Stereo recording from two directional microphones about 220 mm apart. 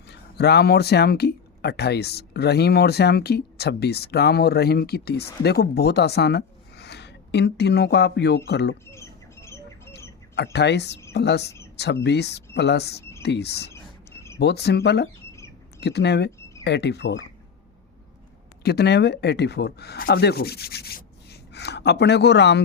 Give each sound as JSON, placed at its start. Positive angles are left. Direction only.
{"t": 0.1, "sound": "speech", "side_deg": 50}
{"t": 8.9, "sound": "squawk", "side_deg": 10}
{"t": 10.3, "sound": "speech", "side_deg": 50}
{"t": 15.3, "sound": "rodents", "side_deg": 10}
{"t": 15.8, "sound": "speech", "side_deg": 50}
{"t": 18.6, "sound": "speech", "side_deg": 45}